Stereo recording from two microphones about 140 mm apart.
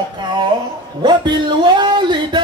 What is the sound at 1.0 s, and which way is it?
Speech, 30° right (ahead or behind).